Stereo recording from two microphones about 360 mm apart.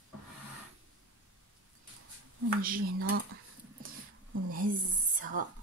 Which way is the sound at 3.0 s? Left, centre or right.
Right.